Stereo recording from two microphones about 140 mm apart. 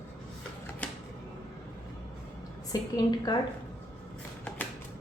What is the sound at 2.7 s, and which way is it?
Speech, 25° left (ahead or behind).